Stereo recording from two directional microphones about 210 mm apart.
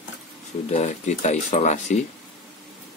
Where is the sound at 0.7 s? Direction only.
35° left (ahead or behind).